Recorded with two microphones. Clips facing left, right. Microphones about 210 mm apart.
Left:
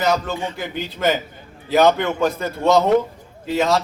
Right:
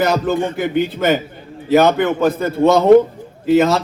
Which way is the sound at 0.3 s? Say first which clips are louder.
Right 9 dB; 55° right (ahead or behind).